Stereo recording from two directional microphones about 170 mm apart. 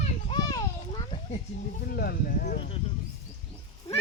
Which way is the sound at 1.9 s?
65° left (ahead or behind).